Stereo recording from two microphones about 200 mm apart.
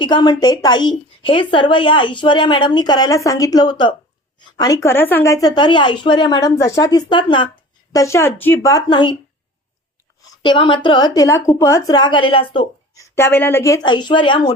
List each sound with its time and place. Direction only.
0.0 s a woman's voice: 20° left (ahead or behind)
10.4 s a woman's voice: 25° left (ahead or behind)